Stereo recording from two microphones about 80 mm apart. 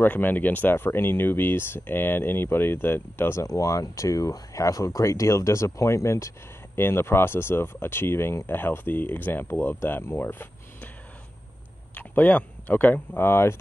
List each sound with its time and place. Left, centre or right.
0.0 s speech: left
3.4 s speech: left
11.9 s speech: left